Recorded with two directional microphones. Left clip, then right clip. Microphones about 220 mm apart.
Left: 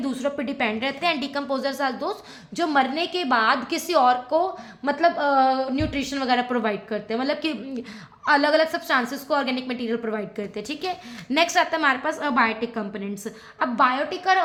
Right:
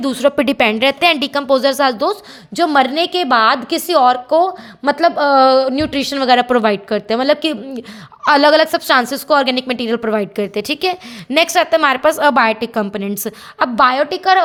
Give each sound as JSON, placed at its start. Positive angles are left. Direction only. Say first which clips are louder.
{"t": 0.0, "sound": "a woman's voice", "louder": "right 12 dB", "side_deg": -45}